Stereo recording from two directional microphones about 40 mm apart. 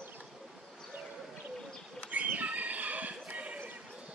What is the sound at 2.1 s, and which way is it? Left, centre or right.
Horse, right.